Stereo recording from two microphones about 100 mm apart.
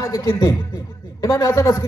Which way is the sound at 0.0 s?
30° left (ahead or behind).